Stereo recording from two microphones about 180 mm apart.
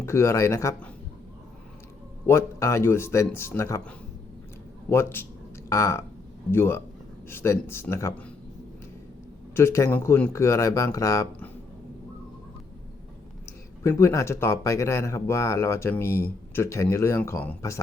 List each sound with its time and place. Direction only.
0.0 s speech: 15° left (ahead or behind)
2.2 s speech: 15° left (ahead or behind)
9.6 s speech: 15° left (ahead or behind)
14.0 s speech: 15° left (ahead or behind)